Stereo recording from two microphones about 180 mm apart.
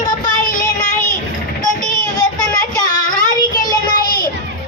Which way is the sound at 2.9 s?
50° left (ahead or behind).